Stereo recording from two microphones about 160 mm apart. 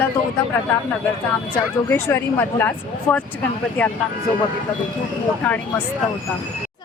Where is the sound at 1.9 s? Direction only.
15° left (ahead or behind).